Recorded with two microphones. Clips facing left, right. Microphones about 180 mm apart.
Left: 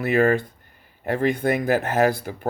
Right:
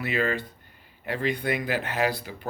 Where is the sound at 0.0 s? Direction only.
50° left (ahead or behind).